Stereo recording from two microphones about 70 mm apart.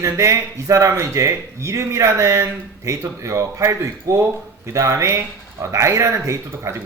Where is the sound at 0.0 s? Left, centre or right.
Right.